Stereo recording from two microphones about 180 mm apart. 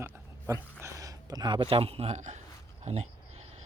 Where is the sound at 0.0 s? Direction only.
15° right (ahead or behind).